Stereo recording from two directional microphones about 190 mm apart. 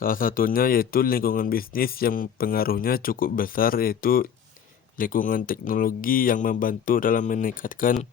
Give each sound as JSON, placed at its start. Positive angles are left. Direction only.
{"t": 0.0, "sound": "a man's voice", "side_deg": 50}